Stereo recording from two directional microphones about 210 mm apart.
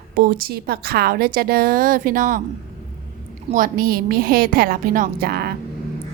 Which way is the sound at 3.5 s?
40° right (ahead or behind).